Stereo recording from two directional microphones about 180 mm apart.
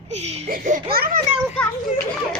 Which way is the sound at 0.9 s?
55° right (ahead or behind).